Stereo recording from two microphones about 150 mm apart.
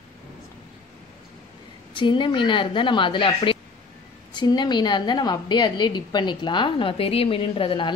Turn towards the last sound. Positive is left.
turn(degrees=35)  # may be behind; listen again after turning